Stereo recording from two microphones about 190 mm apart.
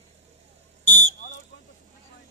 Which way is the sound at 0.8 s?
40° left (ahead or behind).